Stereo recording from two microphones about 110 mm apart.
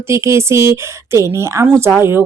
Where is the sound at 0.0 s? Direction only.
25° right (ahead or behind).